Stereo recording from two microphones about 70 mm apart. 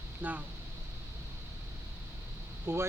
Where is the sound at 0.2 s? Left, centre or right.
Right.